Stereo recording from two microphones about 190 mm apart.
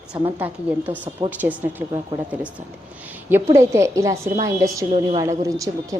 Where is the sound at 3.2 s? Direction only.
10° right (ahead or behind).